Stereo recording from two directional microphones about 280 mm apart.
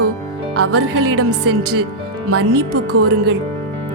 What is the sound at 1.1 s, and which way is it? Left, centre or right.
Music, right.